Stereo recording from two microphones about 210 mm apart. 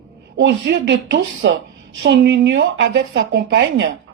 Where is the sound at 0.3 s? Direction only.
55° right (ahead or behind).